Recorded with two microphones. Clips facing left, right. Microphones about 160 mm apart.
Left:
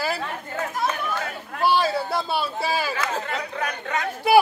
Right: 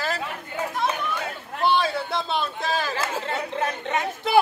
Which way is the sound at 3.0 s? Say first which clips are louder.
Even; 25° right (ahead or behind).